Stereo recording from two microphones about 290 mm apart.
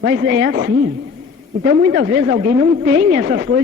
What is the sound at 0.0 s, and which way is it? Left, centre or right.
A man's voice, right.